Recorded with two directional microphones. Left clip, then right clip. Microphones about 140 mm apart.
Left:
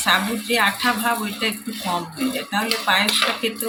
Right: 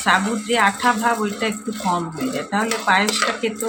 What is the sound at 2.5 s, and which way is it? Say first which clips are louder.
Speech: right 2 dB; 35° right (ahead or behind).